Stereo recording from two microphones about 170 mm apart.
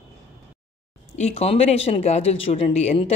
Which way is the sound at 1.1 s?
40° left (ahead or behind).